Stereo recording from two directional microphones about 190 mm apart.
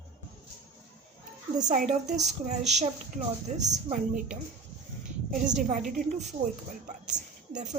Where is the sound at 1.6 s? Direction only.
40° right (ahead or behind).